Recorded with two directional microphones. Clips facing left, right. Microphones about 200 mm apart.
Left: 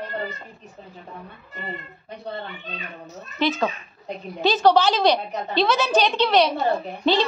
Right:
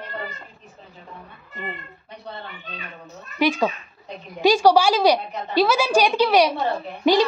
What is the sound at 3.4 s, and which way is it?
A woman's voice, 10° right (ahead or behind).